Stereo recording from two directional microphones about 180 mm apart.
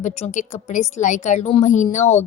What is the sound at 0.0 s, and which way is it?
A woman's voice, 40° left (ahead or behind).